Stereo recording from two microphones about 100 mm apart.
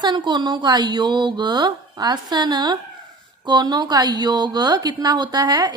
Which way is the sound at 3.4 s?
45° right (ahead or behind).